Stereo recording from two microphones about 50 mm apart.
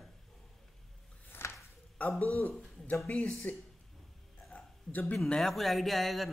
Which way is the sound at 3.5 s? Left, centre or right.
Left.